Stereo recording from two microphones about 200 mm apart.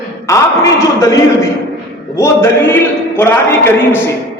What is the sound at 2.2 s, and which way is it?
A man's voice, 10° left (ahead or behind).